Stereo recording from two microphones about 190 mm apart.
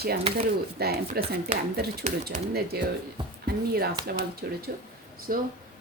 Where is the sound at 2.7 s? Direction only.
55° right (ahead or behind).